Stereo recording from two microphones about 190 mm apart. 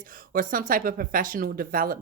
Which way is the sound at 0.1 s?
45° right (ahead or behind).